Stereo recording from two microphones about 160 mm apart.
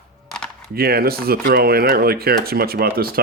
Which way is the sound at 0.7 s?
70° right (ahead or behind).